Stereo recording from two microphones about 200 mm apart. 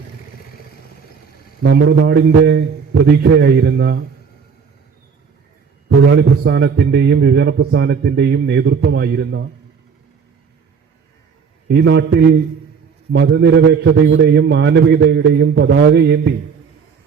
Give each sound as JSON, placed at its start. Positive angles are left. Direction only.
{"t": 1.7, "sound": "a man's voice", "side_deg": -60}
{"t": 6.1, "sound": "a man's voice", "side_deg": -60}
{"t": 11.7, "sound": "a man's voice", "side_deg": -60}